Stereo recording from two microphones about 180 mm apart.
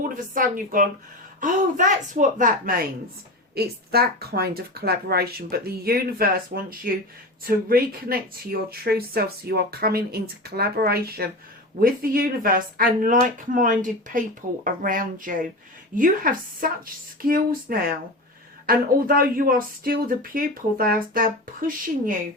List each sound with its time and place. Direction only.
0.0 s speech: 50° right (ahead or behind)
3.5 s speech: 60° right (ahead or behind)